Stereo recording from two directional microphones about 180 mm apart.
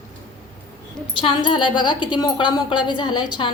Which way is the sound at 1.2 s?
30° left (ahead or behind).